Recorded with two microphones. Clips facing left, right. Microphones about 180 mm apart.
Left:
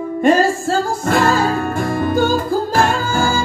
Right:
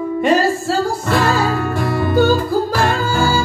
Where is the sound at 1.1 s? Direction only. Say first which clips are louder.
Left 2 dB; 50° left (ahead or behind).